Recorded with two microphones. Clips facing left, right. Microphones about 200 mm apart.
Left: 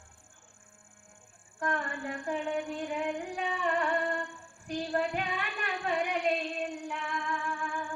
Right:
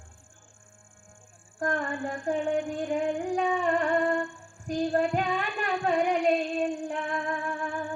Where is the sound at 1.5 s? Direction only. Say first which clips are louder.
Right 5 dB; 45° right (ahead or behind).